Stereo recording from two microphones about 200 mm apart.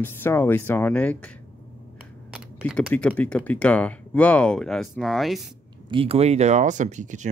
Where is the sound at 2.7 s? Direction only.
5° left (ahead or behind).